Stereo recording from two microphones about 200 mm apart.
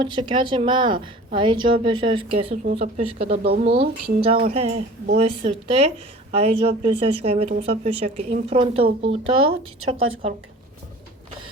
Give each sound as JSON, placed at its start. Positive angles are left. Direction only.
{"t": 0.0, "sound": "a woman's voice", "side_deg": -25}
{"t": 3.4, "sound": "speech", "side_deg": -50}
{"t": 3.7, "sound": "a woman's voice", "side_deg": -30}
{"t": 9.8, "sound": "a woman's voice", "side_deg": -90}